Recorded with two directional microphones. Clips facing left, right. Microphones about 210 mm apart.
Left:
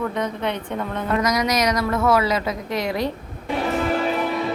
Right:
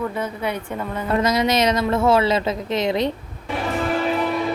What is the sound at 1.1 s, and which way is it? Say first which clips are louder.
A woman's voice: right 2 dB; 30° right (ahead or behind).